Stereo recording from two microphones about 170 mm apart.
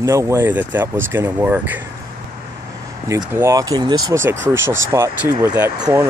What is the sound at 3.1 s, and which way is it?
Speech, 15° right (ahead or behind).